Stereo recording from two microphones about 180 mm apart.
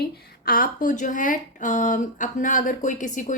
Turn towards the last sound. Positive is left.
turn(degrees=45)  # may be behind; listen again after turning